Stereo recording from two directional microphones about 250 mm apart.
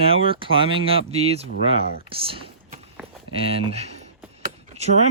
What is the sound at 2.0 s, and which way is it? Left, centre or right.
Vehicle, right.